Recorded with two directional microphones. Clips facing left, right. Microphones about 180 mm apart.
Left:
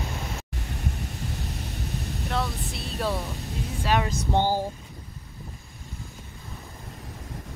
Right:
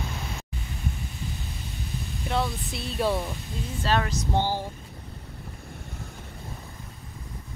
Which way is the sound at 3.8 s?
15° left (ahead or behind).